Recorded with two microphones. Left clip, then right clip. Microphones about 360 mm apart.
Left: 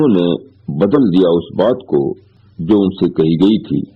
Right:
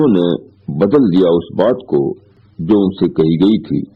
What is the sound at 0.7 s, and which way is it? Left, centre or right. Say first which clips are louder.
A man's voice: right 1 dB; right.